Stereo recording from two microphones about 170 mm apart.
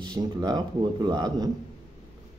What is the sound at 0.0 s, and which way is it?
Speech, 25° right (ahead or behind).